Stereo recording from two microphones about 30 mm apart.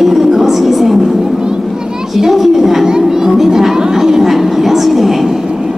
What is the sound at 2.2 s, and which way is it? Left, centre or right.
Speech, centre.